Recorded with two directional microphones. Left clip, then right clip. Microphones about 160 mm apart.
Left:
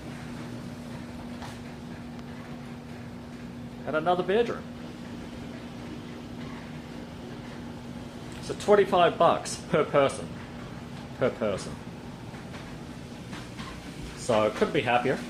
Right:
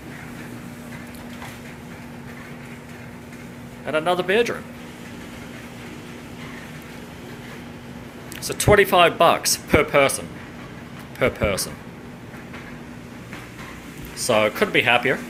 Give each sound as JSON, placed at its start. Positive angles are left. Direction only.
{"t": 3.8, "sound": "speech", "side_deg": -15}
{"t": 8.4, "sound": "speech", "side_deg": -20}
{"t": 11.2, "sound": "speech", "side_deg": -20}
{"t": 14.3, "sound": "speech", "side_deg": -15}